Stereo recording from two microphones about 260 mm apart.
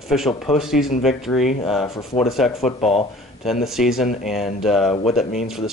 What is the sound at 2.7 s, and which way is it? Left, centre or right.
Speech, left.